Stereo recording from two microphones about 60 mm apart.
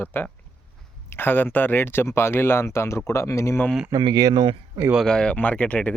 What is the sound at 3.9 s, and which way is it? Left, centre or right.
Speech, right.